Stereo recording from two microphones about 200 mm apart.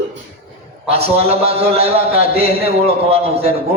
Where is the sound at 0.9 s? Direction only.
30° right (ahead or behind).